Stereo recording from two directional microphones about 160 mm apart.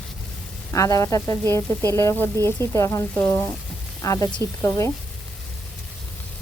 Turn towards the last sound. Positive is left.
turn(degrees=15)  # may be behind; listen again after turning